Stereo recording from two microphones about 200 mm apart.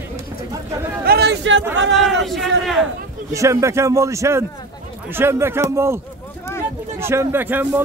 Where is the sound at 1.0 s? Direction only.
55° right (ahead or behind).